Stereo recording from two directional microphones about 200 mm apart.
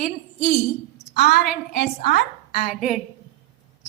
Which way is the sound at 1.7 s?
50° left (ahead or behind).